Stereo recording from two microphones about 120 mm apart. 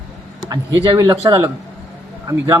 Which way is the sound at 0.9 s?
30° right (ahead or behind).